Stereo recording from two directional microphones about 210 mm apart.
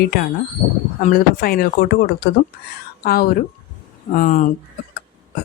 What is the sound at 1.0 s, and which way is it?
Speech, 45° left (ahead or behind).